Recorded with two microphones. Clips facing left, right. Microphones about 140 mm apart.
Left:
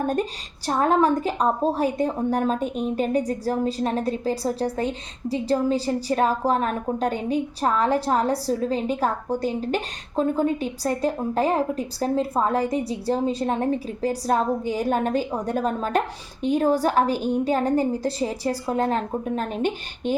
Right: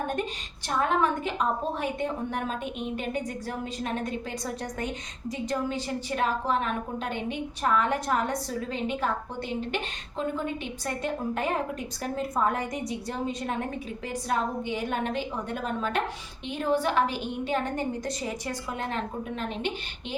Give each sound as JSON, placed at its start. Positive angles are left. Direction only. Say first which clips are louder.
{"t": 0.7, "sound": "a woman's voice", "louder": "left 6 dB", "side_deg": 40}